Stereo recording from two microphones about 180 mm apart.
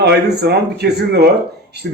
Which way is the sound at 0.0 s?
65° right (ahead or behind).